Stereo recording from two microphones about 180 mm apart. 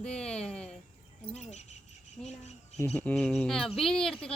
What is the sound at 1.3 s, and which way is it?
Speech, 40° left (ahead or behind).